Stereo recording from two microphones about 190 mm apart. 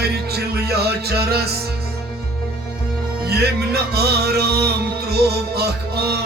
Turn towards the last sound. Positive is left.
turn(degrees=-55)  # may be behind; listen again after turning